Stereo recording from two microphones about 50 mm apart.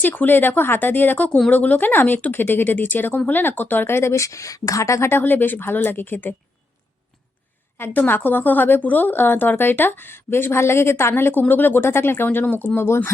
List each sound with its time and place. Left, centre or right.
0.0 s a woman's voice: left
5.0 s speech: left
7.8 s a woman's voice: left
11.1 s a woman's voice: left
11.9 s speech: left